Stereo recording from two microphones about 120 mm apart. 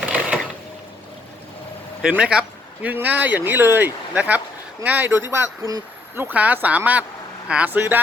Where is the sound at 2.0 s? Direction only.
10° right (ahead or behind).